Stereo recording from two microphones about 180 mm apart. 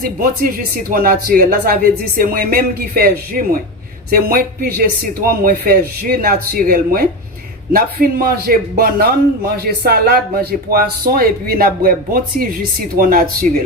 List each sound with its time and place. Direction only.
0.9 s speech: 55° right (ahead or behind)